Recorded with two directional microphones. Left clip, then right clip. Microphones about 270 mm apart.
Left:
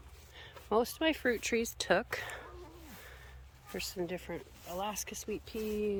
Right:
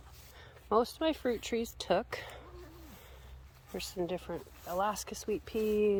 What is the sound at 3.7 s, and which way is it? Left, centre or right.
Speech, centre.